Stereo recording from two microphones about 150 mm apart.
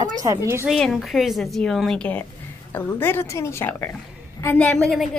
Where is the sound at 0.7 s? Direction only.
Centre (ahead or behind).